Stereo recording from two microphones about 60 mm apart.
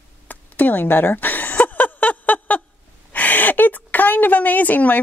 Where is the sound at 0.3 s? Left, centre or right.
Left.